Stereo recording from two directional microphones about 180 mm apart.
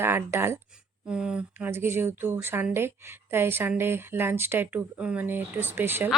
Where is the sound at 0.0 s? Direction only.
15° right (ahead or behind).